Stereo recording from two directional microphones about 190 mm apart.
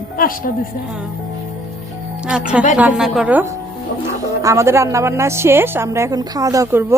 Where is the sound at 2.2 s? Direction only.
5° right (ahead or behind).